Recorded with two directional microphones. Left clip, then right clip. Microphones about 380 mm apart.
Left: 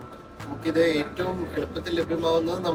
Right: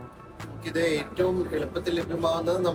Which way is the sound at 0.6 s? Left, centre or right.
Centre.